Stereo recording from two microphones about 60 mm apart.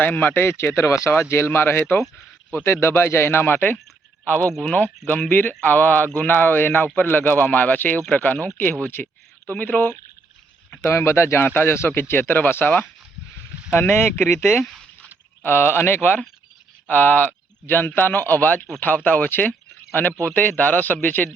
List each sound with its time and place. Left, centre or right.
0.0 s a man's voice: left
9.0 s speech: centre
9.5 s a man's voice: left
10.8 s a man's voice: left
13.7 s a man's voice: left
15.4 s a man's voice: left